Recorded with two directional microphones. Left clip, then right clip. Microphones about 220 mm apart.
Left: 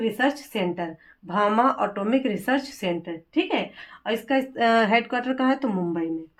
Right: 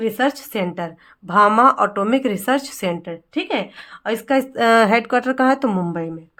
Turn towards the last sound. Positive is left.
turn(degrees=-50)  # may be behind; listen again after turning